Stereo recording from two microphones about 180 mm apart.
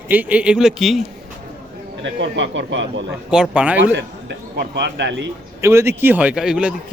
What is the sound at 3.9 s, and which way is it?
Speech, 70° right (ahead or behind).